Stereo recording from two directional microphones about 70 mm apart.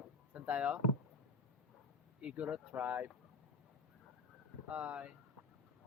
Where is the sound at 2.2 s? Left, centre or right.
Centre.